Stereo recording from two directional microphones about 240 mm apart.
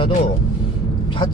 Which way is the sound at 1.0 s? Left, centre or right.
Centre.